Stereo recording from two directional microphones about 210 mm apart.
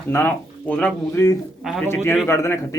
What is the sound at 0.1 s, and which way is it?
A man's voice, 10° left (ahead or behind).